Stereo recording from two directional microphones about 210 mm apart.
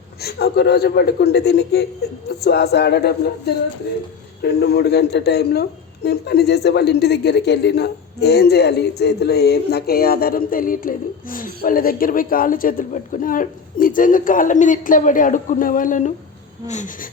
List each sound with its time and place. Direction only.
0.2 s speech: 50° left (ahead or behind)